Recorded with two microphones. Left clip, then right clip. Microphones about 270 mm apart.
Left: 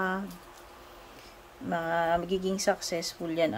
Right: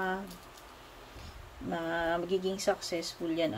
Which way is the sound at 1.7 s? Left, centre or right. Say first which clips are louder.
Left 5 dB; centre.